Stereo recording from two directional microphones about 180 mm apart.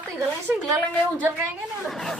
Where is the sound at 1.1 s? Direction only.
10° right (ahead or behind).